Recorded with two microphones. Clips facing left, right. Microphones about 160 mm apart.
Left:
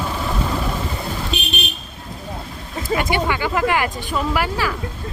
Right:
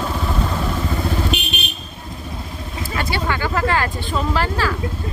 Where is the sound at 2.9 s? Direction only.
15° left (ahead or behind).